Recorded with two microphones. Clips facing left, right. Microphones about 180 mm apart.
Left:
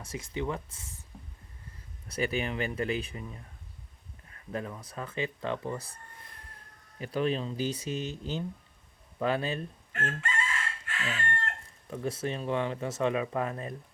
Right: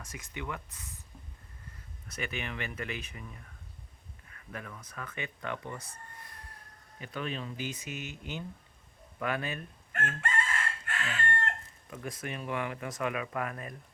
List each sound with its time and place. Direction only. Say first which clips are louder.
0.0 s speech: left 7 dB; 30° left (ahead or behind)
2.0 s speech: left 7 dB; 30° left (ahead or behind)
4.3 s a sound: left 7 dB; 30° left (ahead or behind)
4.9 s speech: left 7 dB; 30° left (ahead or behind)
10.2 s chicken: right 1 dB; 50° right (ahead or behind)
11.9 s speech: left 6 dB; 30° left (ahead or behind)